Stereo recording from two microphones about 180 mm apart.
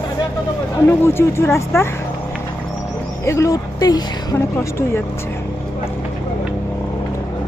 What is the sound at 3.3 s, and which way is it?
Speech, 15° left (ahead or behind).